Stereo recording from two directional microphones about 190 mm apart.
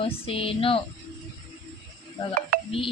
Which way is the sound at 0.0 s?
30° left (ahead or behind).